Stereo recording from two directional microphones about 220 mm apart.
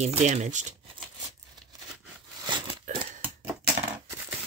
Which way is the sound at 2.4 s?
20° right (ahead or behind).